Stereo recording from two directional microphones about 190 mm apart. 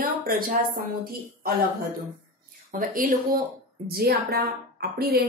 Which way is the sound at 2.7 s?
45° right (ahead or behind).